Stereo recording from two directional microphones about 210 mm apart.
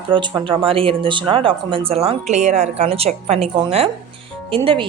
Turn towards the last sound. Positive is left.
turn(degrees=-25)  # may be behind; listen again after turning